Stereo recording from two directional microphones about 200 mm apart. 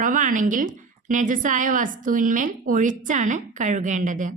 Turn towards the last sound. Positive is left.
turn(degrees=-40)  # may be behind; listen again after turning